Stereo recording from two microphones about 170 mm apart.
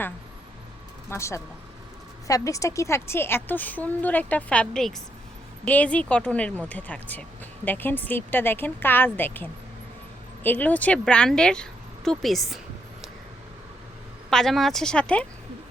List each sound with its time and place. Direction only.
1.1 s speech: 15° left (ahead or behind); by 12.5 s centre (ahead or behind)
14.3 s speech: centre (ahead or behind)